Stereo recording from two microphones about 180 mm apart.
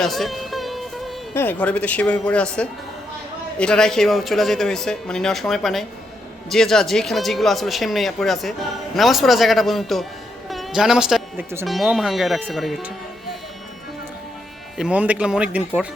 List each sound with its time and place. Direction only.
0.0 s music: centre (ahead or behind)
1.3 s speech: 10° left (ahead or behind)
10.5 s music: centre (ahead or behind)
11.6 s speech: centre (ahead or behind)
14.8 s speech: 5° right (ahead or behind)